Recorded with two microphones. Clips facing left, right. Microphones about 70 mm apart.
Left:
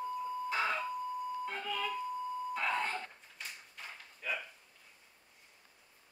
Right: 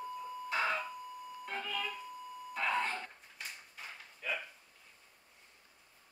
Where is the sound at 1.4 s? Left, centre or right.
Centre.